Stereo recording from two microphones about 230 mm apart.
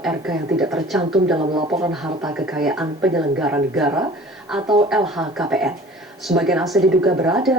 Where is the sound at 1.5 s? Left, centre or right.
Centre.